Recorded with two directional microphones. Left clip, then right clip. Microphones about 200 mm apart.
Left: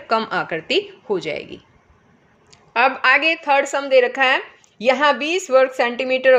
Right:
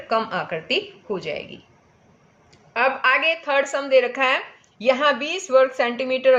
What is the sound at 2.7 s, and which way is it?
Speech, 45° left (ahead or behind).